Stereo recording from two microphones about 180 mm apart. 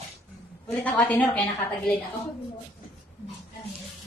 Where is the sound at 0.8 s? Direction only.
10° left (ahead or behind).